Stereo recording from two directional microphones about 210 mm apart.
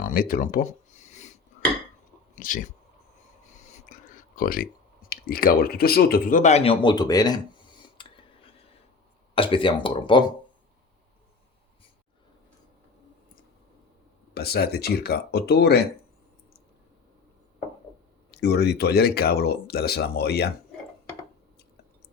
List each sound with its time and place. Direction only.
0.0 s a sound: 40° left (ahead or behind)
2.3 s speech: 40° left (ahead or behind)
3.7 s speech: 35° left (ahead or behind); by 7.4 s 20° left (ahead or behind)
8.0 s whispering: 25° left (ahead or behind)
9.3 s speech: 25° left (ahead or behind)
14.3 s speech: 50° left (ahead or behind)
18.3 s speech: 50° left (ahead or behind)